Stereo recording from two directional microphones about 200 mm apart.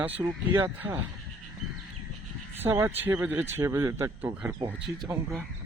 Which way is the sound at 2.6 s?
10° right (ahead or behind).